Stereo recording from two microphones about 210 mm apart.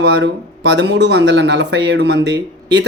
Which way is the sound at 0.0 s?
55° right (ahead or behind).